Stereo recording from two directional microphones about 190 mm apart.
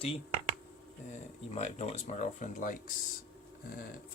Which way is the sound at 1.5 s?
35° left (ahead or behind).